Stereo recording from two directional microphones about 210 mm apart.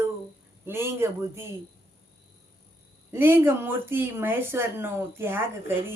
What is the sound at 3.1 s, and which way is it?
Speech, 10° right (ahead or behind).